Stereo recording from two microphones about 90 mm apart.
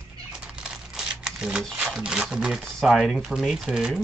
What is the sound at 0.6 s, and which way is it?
Crumpling, 10° right (ahead or behind).